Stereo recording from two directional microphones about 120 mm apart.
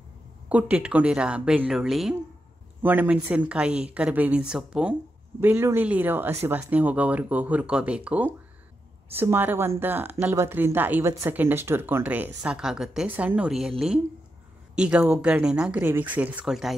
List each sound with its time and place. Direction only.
0.5 s speech: 10° right (ahead or behind)
2.8 s speech: 15° right (ahead or behind)
5.4 s a man's voice: 20° right (ahead or behind); by 16.7 s 5° right (ahead or behind)